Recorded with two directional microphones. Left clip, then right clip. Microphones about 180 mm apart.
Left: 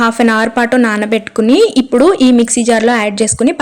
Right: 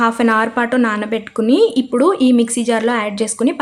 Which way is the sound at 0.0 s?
25° left (ahead or behind).